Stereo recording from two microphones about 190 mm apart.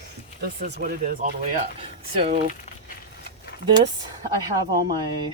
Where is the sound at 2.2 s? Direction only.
35° right (ahead or behind).